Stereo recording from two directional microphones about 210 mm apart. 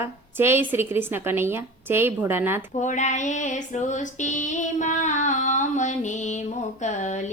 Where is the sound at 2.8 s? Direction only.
35° left (ahead or behind).